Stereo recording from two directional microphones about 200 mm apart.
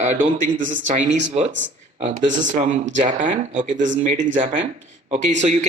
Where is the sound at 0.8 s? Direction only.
35° right (ahead or behind).